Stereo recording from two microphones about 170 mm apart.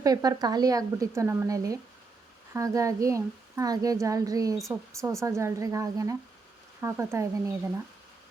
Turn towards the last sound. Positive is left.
turn(degrees=-15)  # may be behind; listen again after turning